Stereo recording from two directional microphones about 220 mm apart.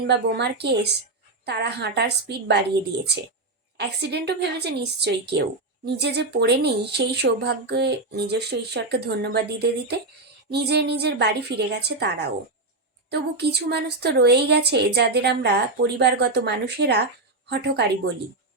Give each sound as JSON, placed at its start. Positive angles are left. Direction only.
{"t": 0.1, "sound": "a woman's voice", "side_deg": -50}
{"t": 3.8, "sound": "a woman's voice", "side_deg": -50}